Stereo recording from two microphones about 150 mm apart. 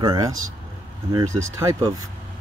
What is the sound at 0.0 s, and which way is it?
Speech, 25° right (ahead or behind).